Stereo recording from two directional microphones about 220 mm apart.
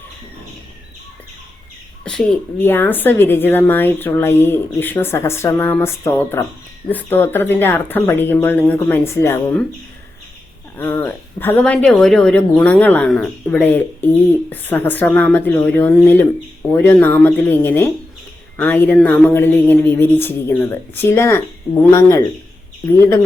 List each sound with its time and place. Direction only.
2.0 s a woman's voice: 5° left (ahead or behind)
10.8 s a woman's voice: 10° left (ahead or behind)
23.0 s a woman's voice: 10° left (ahead or behind)